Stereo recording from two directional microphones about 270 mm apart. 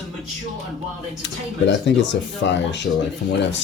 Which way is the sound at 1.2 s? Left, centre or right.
Left.